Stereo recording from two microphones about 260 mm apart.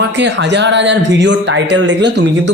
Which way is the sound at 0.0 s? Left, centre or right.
Right.